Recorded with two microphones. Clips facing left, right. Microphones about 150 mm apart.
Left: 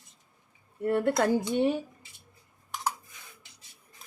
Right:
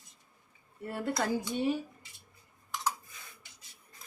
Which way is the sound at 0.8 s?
60° left (ahead or behind).